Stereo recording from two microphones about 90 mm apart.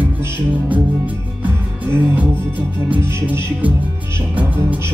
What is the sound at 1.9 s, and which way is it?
Music, 20° right (ahead or behind).